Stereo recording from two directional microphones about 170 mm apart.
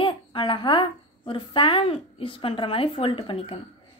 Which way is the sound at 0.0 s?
30° left (ahead or behind).